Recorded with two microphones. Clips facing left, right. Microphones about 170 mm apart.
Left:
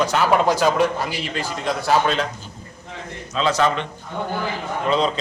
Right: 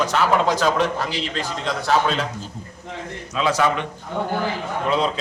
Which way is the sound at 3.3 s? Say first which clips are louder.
Left 1 dB; 10° right (ahead or behind).